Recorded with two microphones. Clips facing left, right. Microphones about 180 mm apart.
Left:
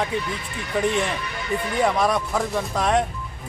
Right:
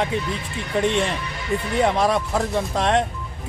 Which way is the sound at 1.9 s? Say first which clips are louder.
Right 1 dB; 25° right (ahead or behind).